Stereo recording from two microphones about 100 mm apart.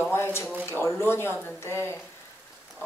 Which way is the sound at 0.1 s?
25° left (ahead or behind).